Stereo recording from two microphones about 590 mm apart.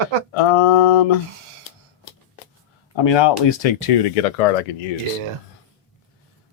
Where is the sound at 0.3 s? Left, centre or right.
Left.